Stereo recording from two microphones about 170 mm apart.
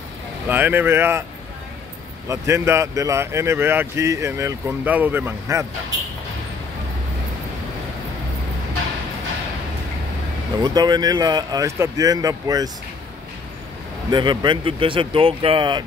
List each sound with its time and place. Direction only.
0.5 s speech: 10° right (ahead or behind)
2.2 s speech: 15° right (ahead or behind)
10.6 s speech: 25° right (ahead or behind)
14.1 s speech: 25° right (ahead or behind)